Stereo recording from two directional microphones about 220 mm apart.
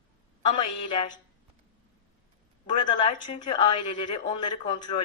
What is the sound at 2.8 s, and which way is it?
A woman's voice, 20° left (ahead or behind).